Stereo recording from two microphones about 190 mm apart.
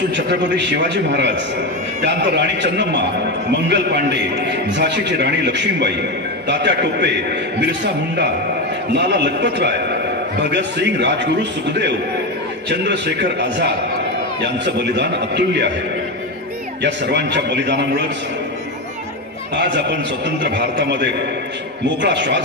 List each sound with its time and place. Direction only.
0.1 s a man's voice: 65° right (ahead or behind)
8.9 s a man's voice: 65° right (ahead or behind)
12.6 s a man's voice: 65° right (ahead or behind)
16.8 s a man's voice: 65° right (ahead or behind)
19.5 s a man's voice: 65° right (ahead or behind)